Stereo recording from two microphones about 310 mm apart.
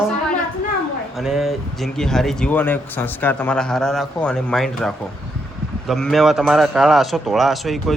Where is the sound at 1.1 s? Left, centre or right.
Centre.